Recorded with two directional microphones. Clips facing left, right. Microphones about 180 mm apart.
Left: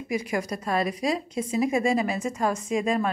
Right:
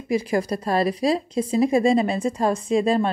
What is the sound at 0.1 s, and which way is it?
A woman's voice, 30° right (ahead or behind).